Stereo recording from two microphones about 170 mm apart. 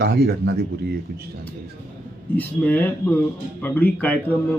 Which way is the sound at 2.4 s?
10° left (ahead or behind).